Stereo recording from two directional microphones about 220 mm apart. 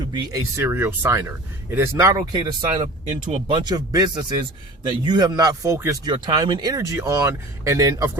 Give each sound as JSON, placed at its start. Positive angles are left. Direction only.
{"t": 0.1, "sound": "speech", "side_deg": -15}
{"t": 2.8, "sound": "speech", "side_deg": -30}
{"t": 3.6, "sound": "speech", "side_deg": -20}